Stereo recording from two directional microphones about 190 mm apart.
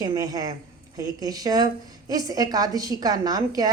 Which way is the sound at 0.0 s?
20° right (ahead or behind).